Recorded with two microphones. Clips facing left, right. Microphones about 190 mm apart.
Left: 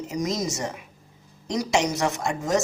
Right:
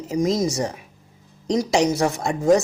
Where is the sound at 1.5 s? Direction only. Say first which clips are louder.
Right 5 dB; 30° right (ahead or behind).